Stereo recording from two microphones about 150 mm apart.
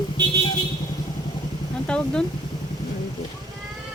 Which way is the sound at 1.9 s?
5° left (ahead or behind).